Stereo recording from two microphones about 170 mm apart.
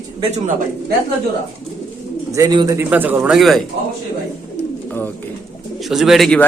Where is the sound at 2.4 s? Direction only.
25° right (ahead or behind).